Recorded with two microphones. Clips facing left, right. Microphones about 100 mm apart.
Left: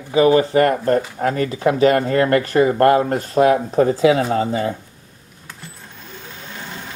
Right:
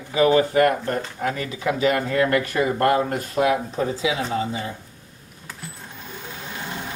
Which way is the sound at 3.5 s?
50° left (ahead or behind).